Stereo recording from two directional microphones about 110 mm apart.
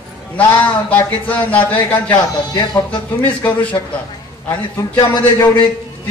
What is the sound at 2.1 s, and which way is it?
Speech, 40° left (ahead or behind).